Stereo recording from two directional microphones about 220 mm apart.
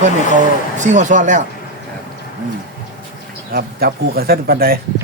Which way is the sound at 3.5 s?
45° right (ahead or behind).